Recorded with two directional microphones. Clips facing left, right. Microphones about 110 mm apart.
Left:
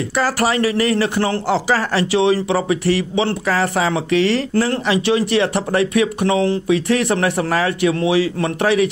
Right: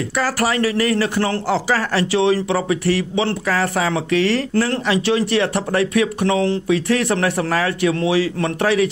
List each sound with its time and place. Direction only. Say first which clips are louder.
0.1 s speech: left 2 dB; 25° left (ahead or behind)